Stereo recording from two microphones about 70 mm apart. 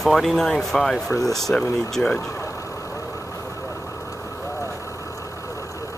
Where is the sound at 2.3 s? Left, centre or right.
Left.